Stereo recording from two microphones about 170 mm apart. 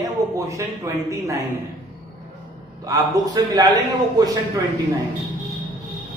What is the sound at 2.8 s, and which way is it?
Speech, 20° right (ahead or behind).